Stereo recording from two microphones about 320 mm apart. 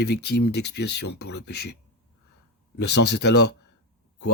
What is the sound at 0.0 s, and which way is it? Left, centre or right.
Speech, left.